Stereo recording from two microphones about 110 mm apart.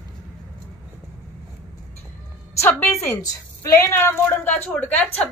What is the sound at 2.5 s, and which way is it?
A woman's voice, 25° left (ahead or behind).